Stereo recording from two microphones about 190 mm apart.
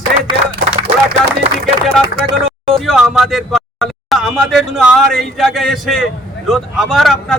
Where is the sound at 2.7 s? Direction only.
Centre (ahead or behind).